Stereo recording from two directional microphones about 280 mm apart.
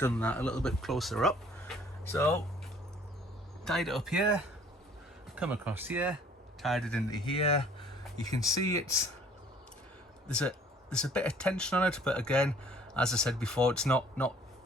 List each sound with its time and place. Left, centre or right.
0.0 s speech: centre
3.7 s speech: centre
5.3 s speech: centre
7.1 s speech: centre
10.2 s speech: centre